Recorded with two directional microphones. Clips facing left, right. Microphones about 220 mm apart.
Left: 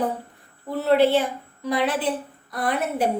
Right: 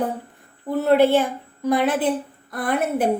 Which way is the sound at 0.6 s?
50° right (ahead or behind).